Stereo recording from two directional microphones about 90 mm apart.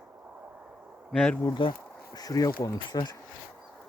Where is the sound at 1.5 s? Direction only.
65° left (ahead or behind).